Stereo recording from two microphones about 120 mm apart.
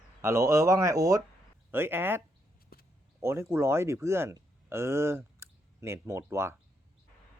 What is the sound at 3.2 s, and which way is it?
Speech, 20° right (ahead or behind).